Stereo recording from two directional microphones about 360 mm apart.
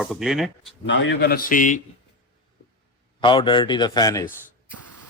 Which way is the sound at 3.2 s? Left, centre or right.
Centre.